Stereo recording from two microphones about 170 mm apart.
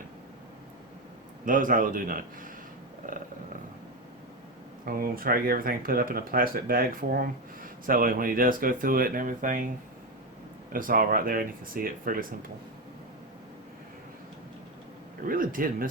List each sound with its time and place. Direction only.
1.5 s a man's voice: 50° right (ahead or behind)
4.9 s speech: 60° right (ahead or behind)
10.7 s speech: 55° right (ahead or behind)
15.3 s speech: 55° right (ahead or behind)